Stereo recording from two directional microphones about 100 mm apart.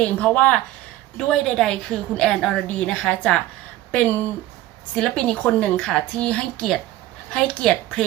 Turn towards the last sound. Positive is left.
turn(degrees=10)  # may be behind; listen again after turning